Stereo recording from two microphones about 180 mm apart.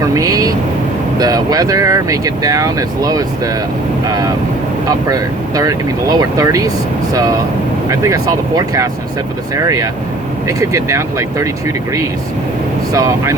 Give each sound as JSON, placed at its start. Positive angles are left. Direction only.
{"t": 0.1, "sound": "speech", "side_deg": -20}
{"t": 4.9, "sound": "speech", "side_deg": -20}
{"t": 12.9, "sound": "speech", "side_deg": -20}